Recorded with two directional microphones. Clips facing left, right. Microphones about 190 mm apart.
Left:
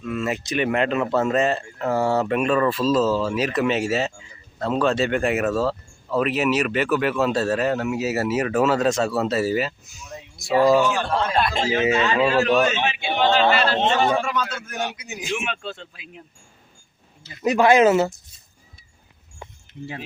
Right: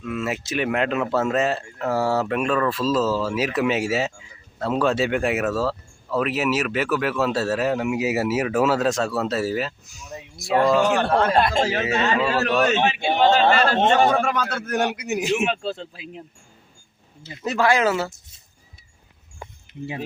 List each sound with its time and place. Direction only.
0.0 s speech: 5° right (ahead or behind)
10.8 s speech: 65° right (ahead or behind); by 11.7 s 45° right (ahead or behind)
11.9 s a man's voice: 35° right (ahead or behind); by 15.3 s 65° right (ahead or behind)
15.4 s speech: 35° right (ahead or behind)
17.4 s speech: 15° left (ahead or behind)